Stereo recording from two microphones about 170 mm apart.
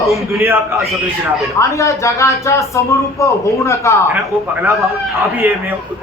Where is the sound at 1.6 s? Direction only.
15° left (ahead or behind).